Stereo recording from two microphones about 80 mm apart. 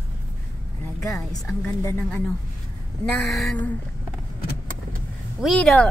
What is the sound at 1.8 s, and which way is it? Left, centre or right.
Speech, left.